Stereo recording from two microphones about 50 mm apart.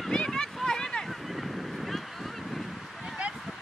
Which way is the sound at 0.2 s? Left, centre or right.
Centre.